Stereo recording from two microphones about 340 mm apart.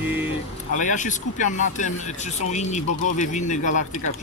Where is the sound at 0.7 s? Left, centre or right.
Left.